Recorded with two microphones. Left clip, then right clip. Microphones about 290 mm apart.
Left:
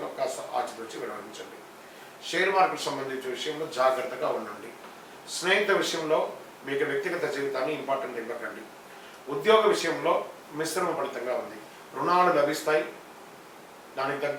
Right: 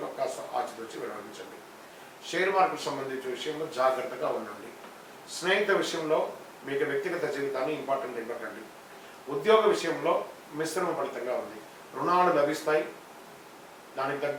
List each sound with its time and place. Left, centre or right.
0.0 s a sound: centre
2.2 s speech: centre
14.0 s speech: centre